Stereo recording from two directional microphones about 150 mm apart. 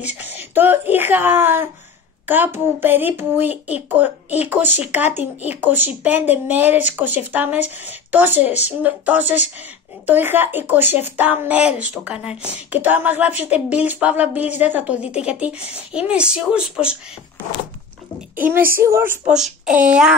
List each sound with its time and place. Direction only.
0.0 s speech: 10° right (ahead or behind)
18.3 s speech: 15° right (ahead or behind)
19.2 s speech: 5° right (ahead or behind)